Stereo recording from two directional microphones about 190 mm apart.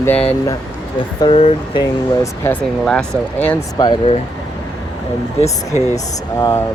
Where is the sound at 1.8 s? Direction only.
15° left (ahead or behind).